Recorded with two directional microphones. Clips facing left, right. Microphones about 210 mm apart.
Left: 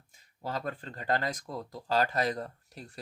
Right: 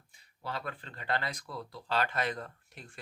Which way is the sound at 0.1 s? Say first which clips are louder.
Left 4 dB; 45° left (ahead or behind).